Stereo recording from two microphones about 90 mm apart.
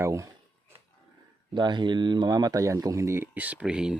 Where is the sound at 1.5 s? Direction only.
60° right (ahead or behind); by 3.3 s 30° right (ahead or behind).